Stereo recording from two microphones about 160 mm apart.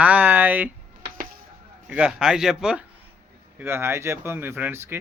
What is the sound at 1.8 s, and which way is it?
A man's voice, 5° right (ahead or behind).